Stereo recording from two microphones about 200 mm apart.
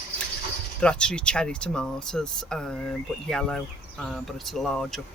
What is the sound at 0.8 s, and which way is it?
Speech, 5° left (ahead or behind).